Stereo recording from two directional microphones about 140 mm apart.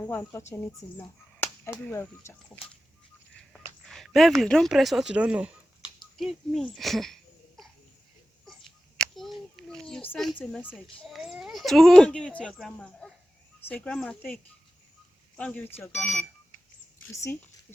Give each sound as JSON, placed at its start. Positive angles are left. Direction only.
{"t": 0.0, "sound": "speech", "side_deg": 15}
{"t": 0.5, "sound": "cap gun", "side_deg": 15}
{"t": 1.9, "sound": "speech", "side_deg": 20}
{"t": 3.8, "sound": "a sound", "side_deg": 0}
{"t": 4.4, "sound": "speech", "side_deg": 5}
{"t": 9.0, "sound": "a sound", "side_deg": 0}
{"t": 10.2, "sound": "speech", "side_deg": 0}
{"t": 10.5, "sound": "speech", "side_deg": 15}
{"t": 10.9, "sound": "speech", "side_deg": 0}